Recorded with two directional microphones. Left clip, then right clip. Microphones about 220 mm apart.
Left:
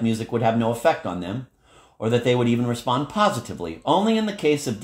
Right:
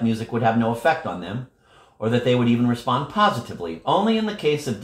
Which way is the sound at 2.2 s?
45° left (ahead or behind).